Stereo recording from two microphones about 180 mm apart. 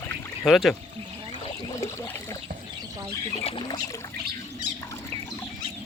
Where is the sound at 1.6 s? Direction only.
15° left (ahead or behind).